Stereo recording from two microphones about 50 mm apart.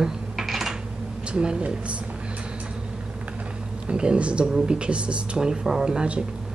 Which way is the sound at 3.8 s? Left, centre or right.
Centre.